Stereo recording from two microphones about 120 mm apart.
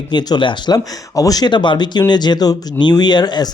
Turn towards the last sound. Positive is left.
turn(degrees=35)  # may be behind; listen again after turning